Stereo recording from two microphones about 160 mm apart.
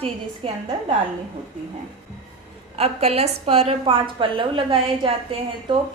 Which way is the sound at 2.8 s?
40° right (ahead or behind).